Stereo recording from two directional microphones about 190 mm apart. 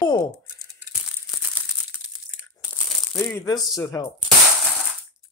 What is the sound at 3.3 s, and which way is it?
Speech, 20° left (ahead or behind).